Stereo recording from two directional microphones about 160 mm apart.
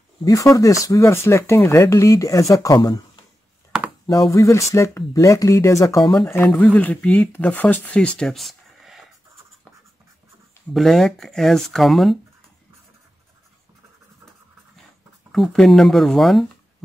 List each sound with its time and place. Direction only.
0.2 s speech: 20° left (ahead or behind)
4.3 s speech: 20° left (ahead or behind); by 9.0 s centre (ahead or behind)
10.7 s speech: centre (ahead or behind)
15.3 s speech: centre (ahead or behind)